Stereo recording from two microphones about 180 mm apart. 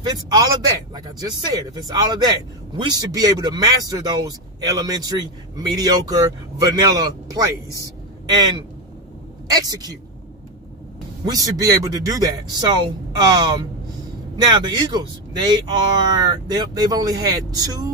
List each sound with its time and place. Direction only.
0.1 s speech: 20° right (ahead or behind)
9.5 s speech: 20° right (ahead or behind)
11.2 s speech: 20° right (ahead or behind)